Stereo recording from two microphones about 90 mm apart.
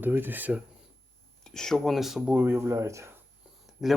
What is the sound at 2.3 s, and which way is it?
Speech, 25° right (ahead or behind).